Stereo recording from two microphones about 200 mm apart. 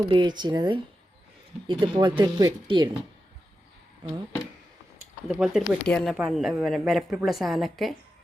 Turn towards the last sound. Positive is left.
turn(degrees=0)  # may be behind; listen again after turning